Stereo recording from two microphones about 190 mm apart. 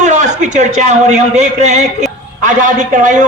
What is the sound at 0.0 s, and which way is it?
A man's voice, 40° right (ahead or behind).